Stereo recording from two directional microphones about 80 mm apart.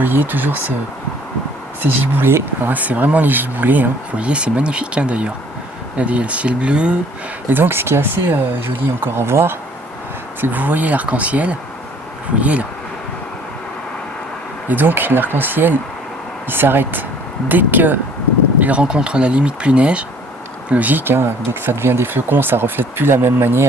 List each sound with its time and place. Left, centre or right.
0.0 s speech: right
1.8 s speech: right
7.4 s speech: right
10.4 s speech: right
14.7 s speech: right